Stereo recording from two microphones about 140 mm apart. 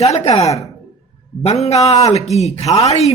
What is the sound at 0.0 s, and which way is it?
A woman's voice, 50° left (ahead or behind).